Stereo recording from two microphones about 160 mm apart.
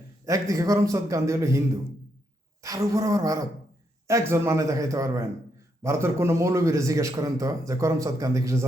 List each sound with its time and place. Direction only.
0.3 s a man's voice: 20° right (ahead or behind)